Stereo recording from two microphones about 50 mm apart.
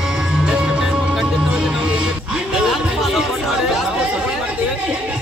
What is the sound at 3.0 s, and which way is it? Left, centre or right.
Speech, centre.